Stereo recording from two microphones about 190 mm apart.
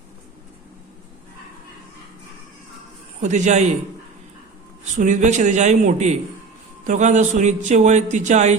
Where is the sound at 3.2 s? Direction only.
40° right (ahead or behind).